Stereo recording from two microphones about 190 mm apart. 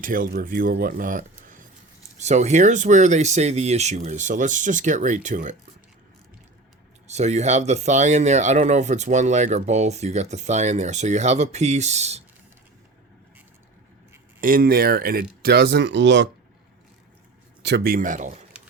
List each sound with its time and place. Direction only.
0.0 s speech: 45° right (ahead or behind)
7.1 s speech: 35° right (ahead or behind)
14.4 s speech: 50° right (ahead or behind); by 16.3 s 70° right (ahead or behind)
17.6 s speech: 60° right (ahead or behind); by 18.4 s 45° right (ahead or behind)